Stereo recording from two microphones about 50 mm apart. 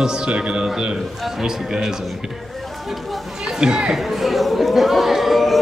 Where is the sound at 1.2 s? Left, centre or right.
Centre.